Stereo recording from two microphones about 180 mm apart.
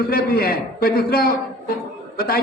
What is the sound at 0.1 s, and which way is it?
A man's voice, 55° left (ahead or behind).